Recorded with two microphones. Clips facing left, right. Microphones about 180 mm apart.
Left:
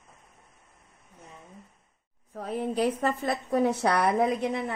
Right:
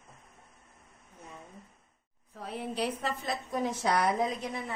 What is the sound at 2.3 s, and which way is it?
A woman's voice, 45° left (ahead or behind).